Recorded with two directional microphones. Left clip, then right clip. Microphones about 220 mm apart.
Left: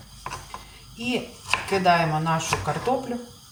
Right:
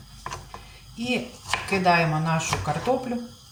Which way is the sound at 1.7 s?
10° left (ahead or behind).